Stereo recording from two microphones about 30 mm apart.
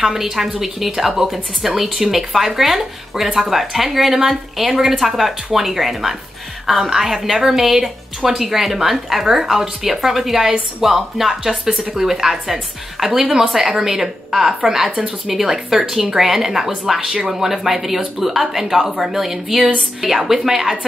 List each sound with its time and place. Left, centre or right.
0.0 s a woman's voice: centre
15.4 s a woman's voice: centre